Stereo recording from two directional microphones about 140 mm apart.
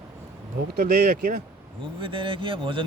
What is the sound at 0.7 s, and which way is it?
Speech, 90° right.